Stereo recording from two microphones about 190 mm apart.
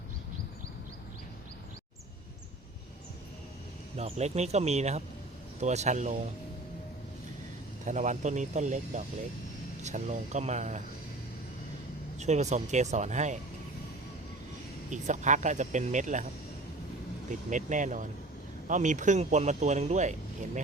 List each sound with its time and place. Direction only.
3.9 s speech: 35° right (ahead or behind)
7.9 s speech: 40° right (ahead or behind)
12.2 s speech: 35° right (ahead or behind)
14.8 s speech: 40° right (ahead or behind)
17.5 s speech: 40° right (ahead or behind)